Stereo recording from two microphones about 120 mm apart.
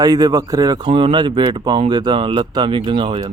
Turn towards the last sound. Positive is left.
turn(degrees=-45)  # may be behind; listen again after turning